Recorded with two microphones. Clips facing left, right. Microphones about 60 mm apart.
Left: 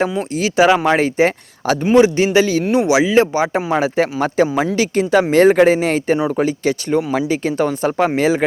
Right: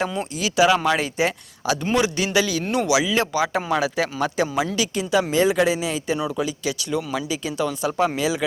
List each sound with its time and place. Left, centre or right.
0.2 s speech: left